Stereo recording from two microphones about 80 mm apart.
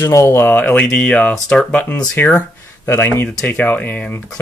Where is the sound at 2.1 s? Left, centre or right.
Left.